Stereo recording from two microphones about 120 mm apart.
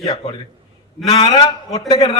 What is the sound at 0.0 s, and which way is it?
A man's voice, 35° left (ahead or behind).